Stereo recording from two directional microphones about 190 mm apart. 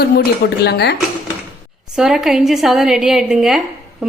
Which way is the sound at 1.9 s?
Centre (ahead or behind).